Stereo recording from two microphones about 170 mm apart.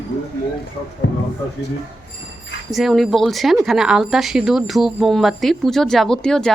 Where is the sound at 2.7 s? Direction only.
Centre (ahead or behind).